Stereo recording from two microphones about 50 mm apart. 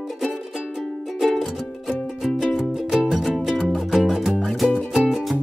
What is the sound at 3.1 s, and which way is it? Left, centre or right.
Music, centre.